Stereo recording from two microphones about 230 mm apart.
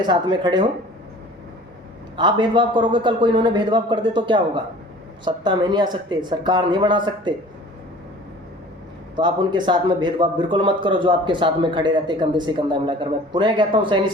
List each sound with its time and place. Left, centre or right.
0.0 s speech: centre
2.1 s speech: centre
9.1 s speech: centre